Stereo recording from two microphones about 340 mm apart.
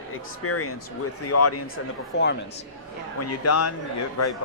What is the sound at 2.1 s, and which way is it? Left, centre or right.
Speech, left.